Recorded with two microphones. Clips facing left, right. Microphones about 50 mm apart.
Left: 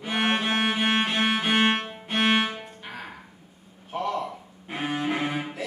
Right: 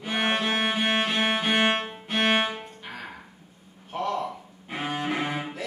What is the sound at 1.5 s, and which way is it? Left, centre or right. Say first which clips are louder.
Music: left 1 dB; centre.